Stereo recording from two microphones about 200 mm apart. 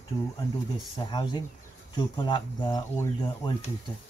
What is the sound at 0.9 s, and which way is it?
Speech, 20° left (ahead or behind).